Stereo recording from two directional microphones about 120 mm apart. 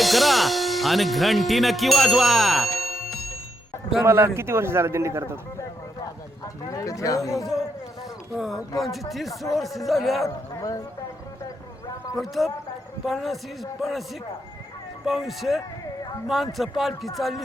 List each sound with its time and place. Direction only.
0.0 s speech: centre (ahead or behind)
4.0 s a man's voice: 20° right (ahead or behind)
5.5 s speech: 25° left (ahead or behind)
8.4 s speech: 5° right (ahead or behind)
10.2 s speech: 30° left (ahead or behind)
12.1 s speech: centre (ahead or behind)